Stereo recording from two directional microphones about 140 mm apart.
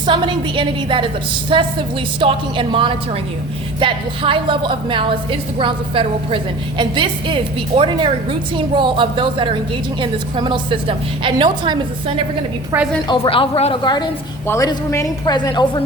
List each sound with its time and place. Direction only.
0.0 s a woman's voice: 35° right (ahead or behind)
13.1 s a woman's voice: 40° left (ahead or behind)
13.8 s a woman's voice: 30° left (ahead or behind)
14.4 s speech: 20° left (ahead or behind)
15.3 s a woman's voice: 30° left (ahead or behind)